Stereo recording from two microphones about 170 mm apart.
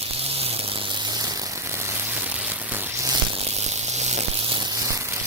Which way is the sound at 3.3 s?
35° right (ahead or behind).